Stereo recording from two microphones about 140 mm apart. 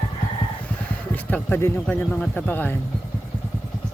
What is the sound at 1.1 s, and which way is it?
Speech, 15° left (ahead or behind).